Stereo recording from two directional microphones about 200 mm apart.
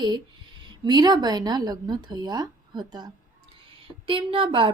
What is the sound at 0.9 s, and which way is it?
A woman's voice, 20° right (ahead or behind).